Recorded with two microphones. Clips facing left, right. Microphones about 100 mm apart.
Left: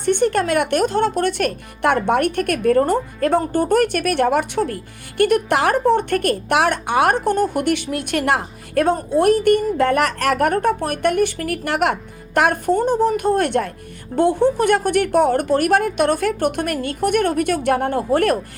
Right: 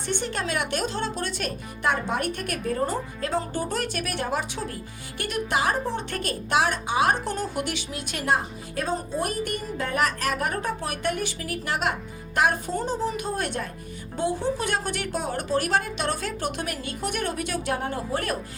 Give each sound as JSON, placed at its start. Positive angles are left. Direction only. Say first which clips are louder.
{"t": 0.0, "sound": "speech", "louder": "left 12 dB", "side_deg": 55}